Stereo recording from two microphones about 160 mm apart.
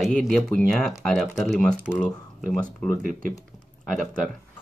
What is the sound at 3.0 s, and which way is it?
Speech, 60° right (ahead or behind).